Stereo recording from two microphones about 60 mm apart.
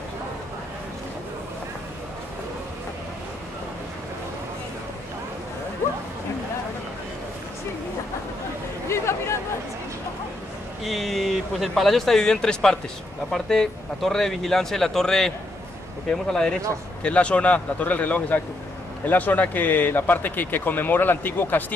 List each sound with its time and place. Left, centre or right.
8.8 s chatter: left
10.8 s a man's voice: centre; by 21.7 s left